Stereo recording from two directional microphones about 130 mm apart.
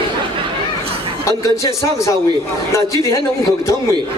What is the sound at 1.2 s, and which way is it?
Speech, 25° left (ahead or behind).